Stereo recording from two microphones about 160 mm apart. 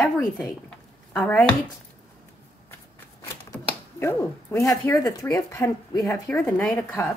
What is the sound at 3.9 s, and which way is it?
Speech, 15° left (ahead or behind).